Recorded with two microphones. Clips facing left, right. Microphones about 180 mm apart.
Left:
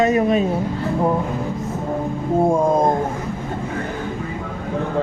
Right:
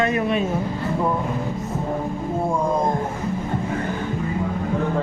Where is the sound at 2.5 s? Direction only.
50° left (ahead or behind).